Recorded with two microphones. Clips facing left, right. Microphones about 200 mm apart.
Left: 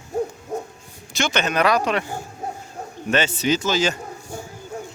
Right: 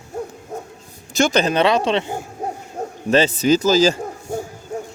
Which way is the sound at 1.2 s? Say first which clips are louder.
Right 5 dB; 40° right (ahead or behind).